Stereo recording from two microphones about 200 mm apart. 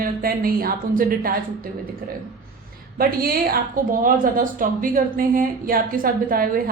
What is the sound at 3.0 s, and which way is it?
Speech, 50° right (ahead or behind).